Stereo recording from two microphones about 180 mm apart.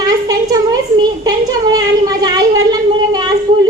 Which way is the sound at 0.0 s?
20° right (ahead or behind).